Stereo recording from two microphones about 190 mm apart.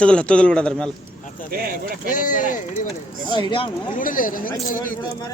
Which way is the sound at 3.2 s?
25° left (ahead or behind).